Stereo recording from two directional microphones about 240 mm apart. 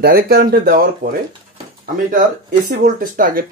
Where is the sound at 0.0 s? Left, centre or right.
Right.